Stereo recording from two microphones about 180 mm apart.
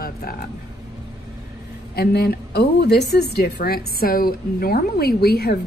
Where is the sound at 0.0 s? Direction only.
55° left (ahead or behind).